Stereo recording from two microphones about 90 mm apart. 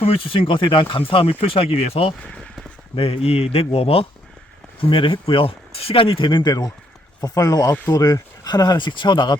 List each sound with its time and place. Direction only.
0.0 s speech: 90° left
4.8 s speech: 70° left (ahead or behind)
6.5 s speech: 45° left (ahead or behind)